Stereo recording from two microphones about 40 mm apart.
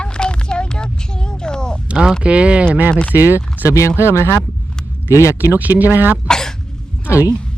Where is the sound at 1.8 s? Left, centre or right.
Right.